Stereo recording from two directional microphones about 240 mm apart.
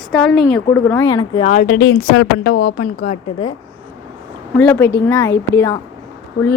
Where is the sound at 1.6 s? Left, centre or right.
Left.